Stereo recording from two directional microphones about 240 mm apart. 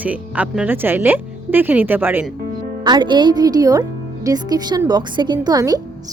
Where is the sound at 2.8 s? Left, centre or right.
Centre.